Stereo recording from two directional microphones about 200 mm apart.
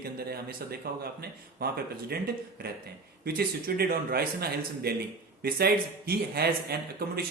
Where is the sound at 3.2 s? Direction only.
50° right (ahead or behind).